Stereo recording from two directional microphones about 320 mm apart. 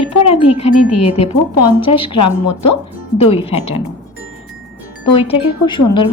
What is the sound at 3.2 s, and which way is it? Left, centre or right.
Speech, centre.